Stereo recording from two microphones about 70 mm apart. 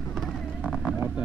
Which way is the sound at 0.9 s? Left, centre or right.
Centre.